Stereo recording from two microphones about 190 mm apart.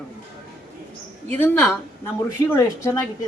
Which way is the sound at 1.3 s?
10° left (ahead or behind).